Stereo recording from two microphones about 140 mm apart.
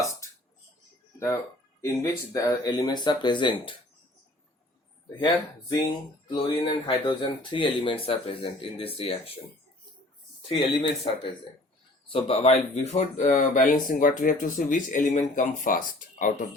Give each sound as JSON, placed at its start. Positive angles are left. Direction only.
{"t": 0.0, "sound": "burping", "side_deg": 20}
{"t": 1.8, "sound": "speech", "side_deg": 20}
{"t": 5.2, "sound": "speech", "side_deg": 25}
{"t": 11.1, "sound": "speech", "side_deg": 35}